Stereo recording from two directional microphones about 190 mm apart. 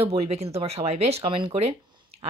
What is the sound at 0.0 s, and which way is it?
A woman's voice, 35° right (ahead or behind).